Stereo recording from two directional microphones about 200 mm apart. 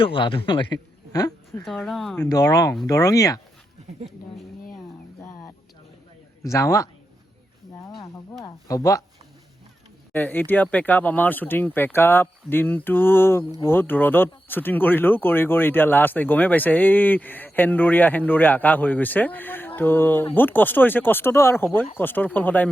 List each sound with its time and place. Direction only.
0.0 s speech: 25° left (ahead or behind)
1.6 s speech: centre (ahead or behind)
2.3 s speech: 20° left (ahead or behind)
6.4 s speech: 15° left (ahead or behind)
8.4 s speech: 15° left (ahead or behind)
10.1 s speech: 10° left (ahead or behind)